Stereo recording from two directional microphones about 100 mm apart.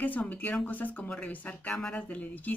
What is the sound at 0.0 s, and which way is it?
A woman's voice, 15° left (ahead or behind).